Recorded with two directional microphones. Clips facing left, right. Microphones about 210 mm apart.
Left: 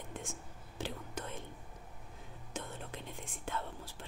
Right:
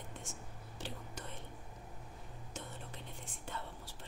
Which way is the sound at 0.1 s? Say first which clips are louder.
Left 4 dB; 90° left.